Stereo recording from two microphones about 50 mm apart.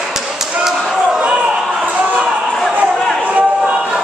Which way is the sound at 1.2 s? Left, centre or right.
Right.